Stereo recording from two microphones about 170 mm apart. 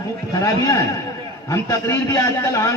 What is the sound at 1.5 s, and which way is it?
A man's voice, 20° left (ahead or behind).